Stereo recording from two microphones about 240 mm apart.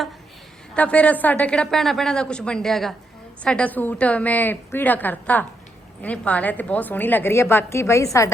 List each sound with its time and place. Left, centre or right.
0.7 s a woman's voice: centre